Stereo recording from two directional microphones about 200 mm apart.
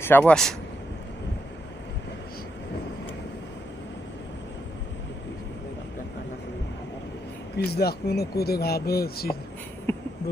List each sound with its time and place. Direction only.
0.0 s speech: 10° left (ahead or behind)
7.5 s speech: 55° left (ahead or behind)
9.9 s a sound: 10° left (ahead or behind)